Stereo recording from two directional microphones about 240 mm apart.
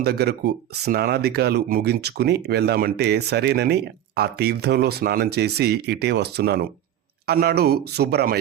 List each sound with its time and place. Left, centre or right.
0.0 s speech: right